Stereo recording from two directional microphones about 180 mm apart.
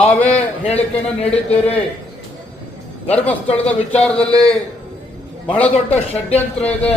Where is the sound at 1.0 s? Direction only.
35° left (ahead or behind).